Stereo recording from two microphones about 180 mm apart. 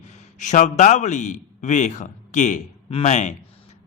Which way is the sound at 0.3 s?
45° left (ahead or behind).